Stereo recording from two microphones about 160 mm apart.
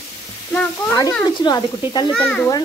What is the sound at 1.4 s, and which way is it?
Speech, 25° left (ahead or behind).